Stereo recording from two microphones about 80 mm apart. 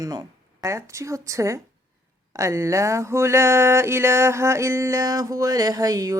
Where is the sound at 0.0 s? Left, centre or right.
Right.